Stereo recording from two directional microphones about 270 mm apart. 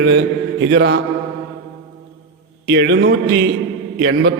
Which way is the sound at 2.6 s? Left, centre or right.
Right.